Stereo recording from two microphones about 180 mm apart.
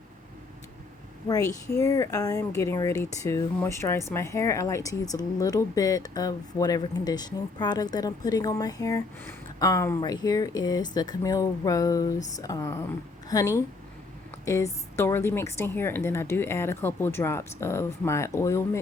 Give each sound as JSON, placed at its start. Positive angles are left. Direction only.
{"t": 1.8, "sound": "a woman's voice", "side_deg": 20}